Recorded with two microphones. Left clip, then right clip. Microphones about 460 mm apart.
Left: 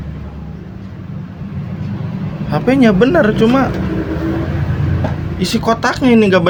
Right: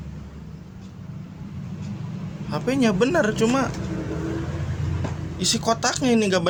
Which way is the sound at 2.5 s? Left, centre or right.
Right.